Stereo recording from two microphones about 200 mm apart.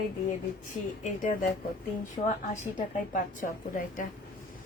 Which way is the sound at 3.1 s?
45° left (ahead or behind).